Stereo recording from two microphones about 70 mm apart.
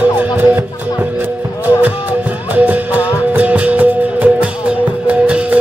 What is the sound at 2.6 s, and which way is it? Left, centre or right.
Music, right.